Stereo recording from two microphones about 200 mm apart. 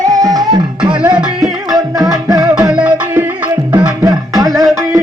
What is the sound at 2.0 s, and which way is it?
Music, centre (ahead or behind).